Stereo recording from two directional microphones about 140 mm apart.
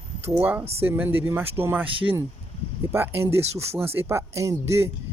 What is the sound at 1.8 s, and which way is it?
Speech, 40° right (ahead or behind).